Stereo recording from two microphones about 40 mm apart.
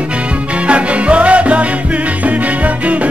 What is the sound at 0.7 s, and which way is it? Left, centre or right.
Music, right.